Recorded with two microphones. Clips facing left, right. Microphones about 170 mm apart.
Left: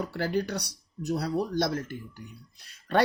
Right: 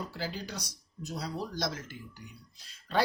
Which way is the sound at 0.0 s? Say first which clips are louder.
Left 9 dB; 60° left (ahead or behind).